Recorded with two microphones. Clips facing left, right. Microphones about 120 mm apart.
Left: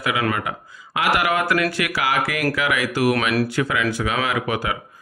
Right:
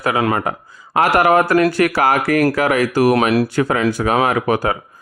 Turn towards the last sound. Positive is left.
turn(degrees=-45)  # may be behind; listen again after turning